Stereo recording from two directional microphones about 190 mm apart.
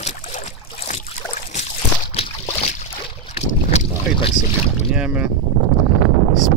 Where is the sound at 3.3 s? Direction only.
30° left (ahead or behind).